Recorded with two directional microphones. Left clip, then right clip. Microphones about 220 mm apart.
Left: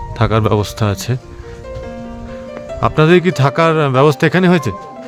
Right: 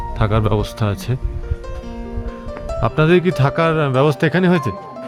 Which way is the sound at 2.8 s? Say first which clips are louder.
Left 4 dB; 20° left (ahead or behind).